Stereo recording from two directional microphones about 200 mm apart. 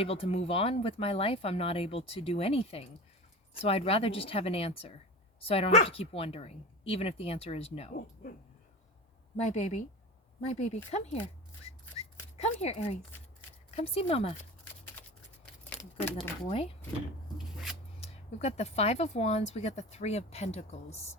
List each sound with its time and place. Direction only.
0.0 s speech: 30° left (ahead or behind)
9.5 s speech: 35° left (ahead or behind)
12.4 s speech: 30° left (ahead or behind)
16.0 s speech: 10° left (ahead or behind)
16.5 s speech: 30° left (ahead or behind)
17.3 s a sound: centre (ahead or behind)
18.0 s speech: 35° left (ahead or behind)